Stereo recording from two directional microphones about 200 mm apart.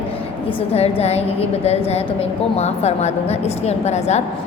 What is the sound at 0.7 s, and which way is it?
A woman's voice, 30° left (ahead or behind).